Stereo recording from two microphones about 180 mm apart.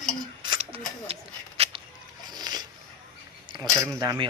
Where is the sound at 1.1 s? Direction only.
35° right (ahead or behind).